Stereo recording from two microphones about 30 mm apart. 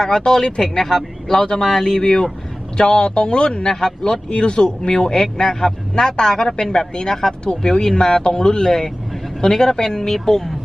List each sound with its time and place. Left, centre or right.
0.0 s speech: left
3.7 s speech: left
4.3 s speech: left
7.1 s speech: centre
7.6 s speech: left
10.1 s speech: centre